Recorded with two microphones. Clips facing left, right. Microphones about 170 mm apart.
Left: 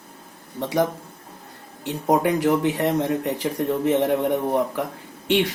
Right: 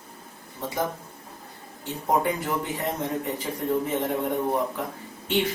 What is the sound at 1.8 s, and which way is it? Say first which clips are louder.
Speech: left 4 dB; 85° left.